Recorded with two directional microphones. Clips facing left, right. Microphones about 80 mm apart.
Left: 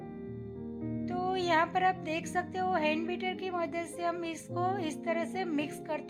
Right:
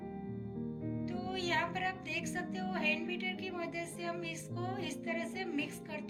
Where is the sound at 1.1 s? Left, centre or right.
Left.